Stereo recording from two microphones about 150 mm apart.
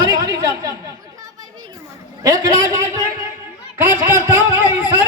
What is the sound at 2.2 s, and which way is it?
Speech, 25° right (ahead or behind).